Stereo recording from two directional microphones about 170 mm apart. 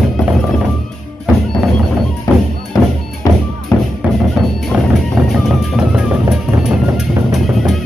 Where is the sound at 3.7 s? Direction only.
20° left (ahead or behind).